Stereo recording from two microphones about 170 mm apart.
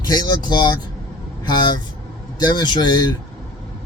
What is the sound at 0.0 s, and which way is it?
Speech, 25° left (ahead or behind).